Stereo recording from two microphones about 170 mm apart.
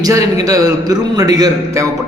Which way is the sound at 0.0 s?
20° right (ahead or behind).